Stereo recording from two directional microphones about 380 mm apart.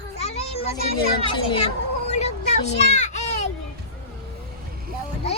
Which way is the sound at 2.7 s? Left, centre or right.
Left.